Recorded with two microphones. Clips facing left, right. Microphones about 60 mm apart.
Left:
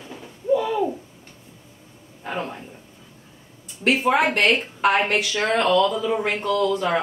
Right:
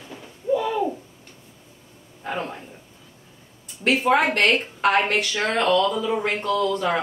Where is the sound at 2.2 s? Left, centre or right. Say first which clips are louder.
Even; centre.